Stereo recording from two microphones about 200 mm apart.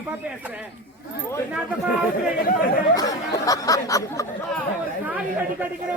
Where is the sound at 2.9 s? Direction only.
20° left (ahead or behind).